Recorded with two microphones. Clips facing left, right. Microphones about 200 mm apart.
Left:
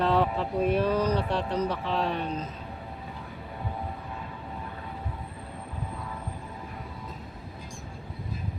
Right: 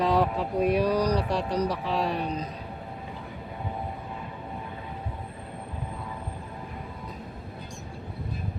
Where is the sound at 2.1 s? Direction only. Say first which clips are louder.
Right 1 dB; 35° right (ahead or behind).